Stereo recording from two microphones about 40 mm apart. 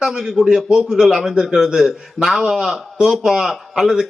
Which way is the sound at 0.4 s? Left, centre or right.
Right.